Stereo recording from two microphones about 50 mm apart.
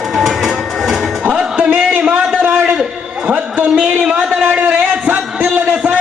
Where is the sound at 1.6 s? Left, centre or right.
Right.